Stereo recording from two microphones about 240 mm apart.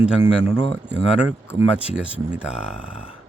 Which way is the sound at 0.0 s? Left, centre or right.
Centre.